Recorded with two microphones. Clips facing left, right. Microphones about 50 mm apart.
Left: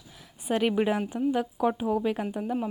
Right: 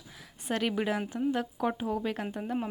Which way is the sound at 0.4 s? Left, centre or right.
Centre.